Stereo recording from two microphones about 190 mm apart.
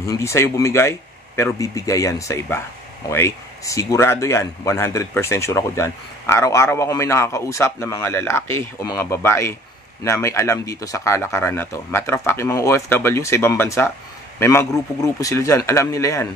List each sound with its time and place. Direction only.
0.0 s speech: 15° left (ahead or behind)